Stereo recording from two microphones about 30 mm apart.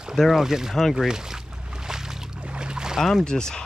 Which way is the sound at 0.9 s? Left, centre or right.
Right.